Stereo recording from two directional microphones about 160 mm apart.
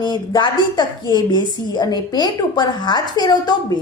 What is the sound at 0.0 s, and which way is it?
A woman's voice, 30° left (ahead or behind).